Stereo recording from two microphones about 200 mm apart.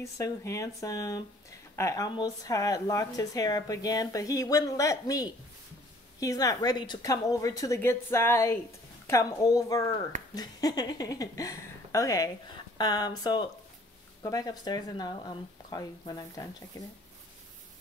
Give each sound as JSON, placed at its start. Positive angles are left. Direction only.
{"t": 0.0, "sound": "speech", "side_deg": 15}